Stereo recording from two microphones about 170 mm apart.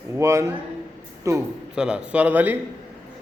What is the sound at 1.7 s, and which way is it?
Speech, 5° right (ahead or behind).